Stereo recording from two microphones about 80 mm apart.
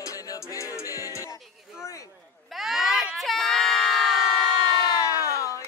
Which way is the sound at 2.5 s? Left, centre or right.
Centre.